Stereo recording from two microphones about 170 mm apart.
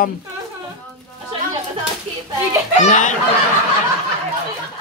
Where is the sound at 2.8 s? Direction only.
45° left (ahead or behind).